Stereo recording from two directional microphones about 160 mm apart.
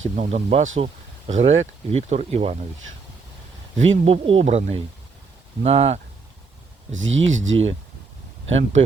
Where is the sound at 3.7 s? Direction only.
40° right (ahead or behind).